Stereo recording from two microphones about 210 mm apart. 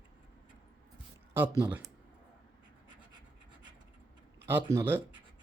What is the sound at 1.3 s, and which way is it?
Speech, 10° right (ahead or behind).